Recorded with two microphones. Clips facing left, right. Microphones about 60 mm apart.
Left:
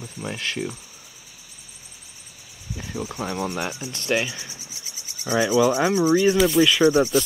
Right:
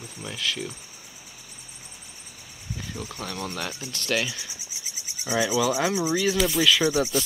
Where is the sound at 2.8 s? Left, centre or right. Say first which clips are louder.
Left 6 dB; centre.